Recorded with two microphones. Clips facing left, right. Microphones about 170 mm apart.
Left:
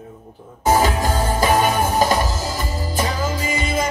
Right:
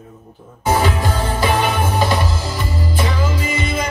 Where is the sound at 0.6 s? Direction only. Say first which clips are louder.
Left 1 dB; 40° left (ahead or behind).